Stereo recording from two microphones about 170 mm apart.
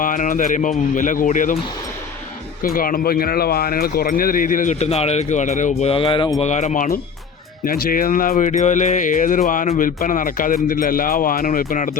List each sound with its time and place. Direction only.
0.0 s speech: 50° left (ahead or behind)
2.6 s speech: 55° left (ahead or behind)
5.9 s speech: 30° left (ahead or behind)
6.4 s speech: 45° left (ahead or behind)